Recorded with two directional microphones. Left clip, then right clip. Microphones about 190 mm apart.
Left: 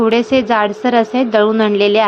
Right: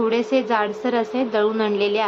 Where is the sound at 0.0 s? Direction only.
40° left (ahead or behind).